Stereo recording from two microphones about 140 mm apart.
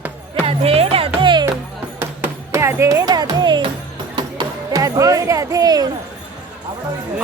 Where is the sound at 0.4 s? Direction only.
45° right (ahead or behind).